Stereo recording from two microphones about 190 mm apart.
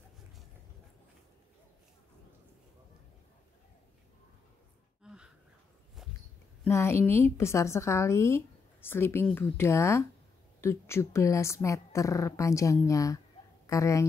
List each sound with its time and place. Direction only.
5.0 s gasp: 5° right (ahead or behind)
6.0 s a sound: centre (ahead or behind)
6.6 s a woman's voice: 15° left (ahead or behind)